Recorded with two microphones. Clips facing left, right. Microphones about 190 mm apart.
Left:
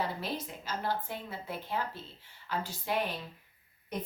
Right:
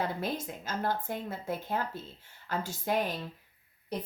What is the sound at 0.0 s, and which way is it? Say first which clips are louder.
A woman's voice: right 2 dB; 50° right (ahead or behind).